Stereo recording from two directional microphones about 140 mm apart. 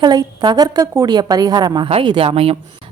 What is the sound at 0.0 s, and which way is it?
A woman's voice, 30° right (ahead or behind).